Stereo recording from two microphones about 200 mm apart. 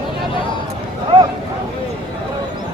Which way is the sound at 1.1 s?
25° right (ahead or behind).